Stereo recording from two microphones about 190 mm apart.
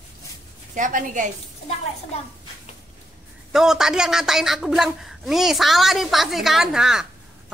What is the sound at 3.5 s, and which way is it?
A woman's voice, 5° right (ahead or behind).